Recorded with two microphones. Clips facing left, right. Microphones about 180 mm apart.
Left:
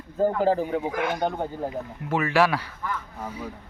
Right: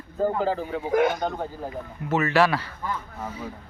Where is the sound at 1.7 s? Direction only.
10° left (ahead or behind).